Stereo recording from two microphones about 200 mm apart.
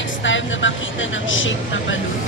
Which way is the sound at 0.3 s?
70° left (ahead or behind).